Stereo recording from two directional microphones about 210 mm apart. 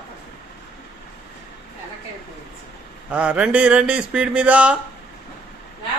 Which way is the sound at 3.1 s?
5° right (ahead or behind).